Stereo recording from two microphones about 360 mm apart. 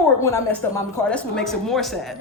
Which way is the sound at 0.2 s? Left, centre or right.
Centre.